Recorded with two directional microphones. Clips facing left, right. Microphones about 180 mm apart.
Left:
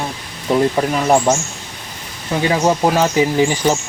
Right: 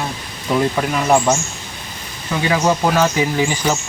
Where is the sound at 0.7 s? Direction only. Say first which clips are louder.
Left 1 dB; 25° left (ahead or behind).